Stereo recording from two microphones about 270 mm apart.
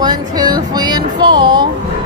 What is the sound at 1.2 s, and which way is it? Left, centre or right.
Speech, centre.